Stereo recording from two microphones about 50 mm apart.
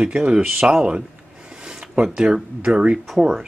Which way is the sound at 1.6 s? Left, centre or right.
Centre.